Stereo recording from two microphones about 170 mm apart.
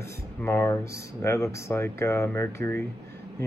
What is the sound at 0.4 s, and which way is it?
Speech, 15° left (ahead or behind).